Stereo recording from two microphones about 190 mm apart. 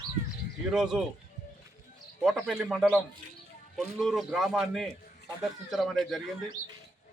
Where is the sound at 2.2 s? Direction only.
5° right (ahead or behind).